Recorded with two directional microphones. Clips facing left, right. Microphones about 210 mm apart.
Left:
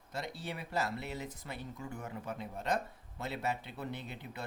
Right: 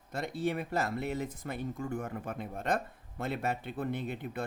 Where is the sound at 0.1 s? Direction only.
50° right (ahead or behind).